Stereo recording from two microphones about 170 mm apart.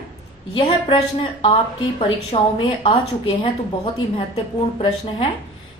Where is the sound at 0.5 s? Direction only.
30° left (ahead or behind).